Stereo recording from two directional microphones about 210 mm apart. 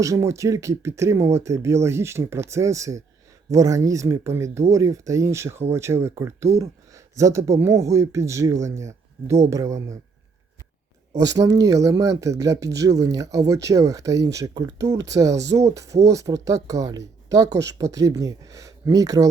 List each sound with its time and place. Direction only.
0.0 s speech: 15° right (ahead or behind)
11.3 s speech: 15° right (ahead or behind)